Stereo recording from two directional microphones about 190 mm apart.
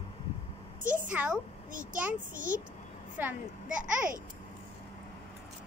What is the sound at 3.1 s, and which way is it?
Speech, 5° right (ahead or behind).